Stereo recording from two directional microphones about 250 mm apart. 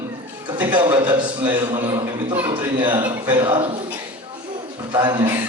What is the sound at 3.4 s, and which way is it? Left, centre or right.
Speech, right.